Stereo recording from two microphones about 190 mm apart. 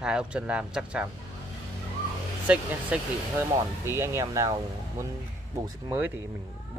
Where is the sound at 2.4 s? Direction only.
5° right (ahead or behind).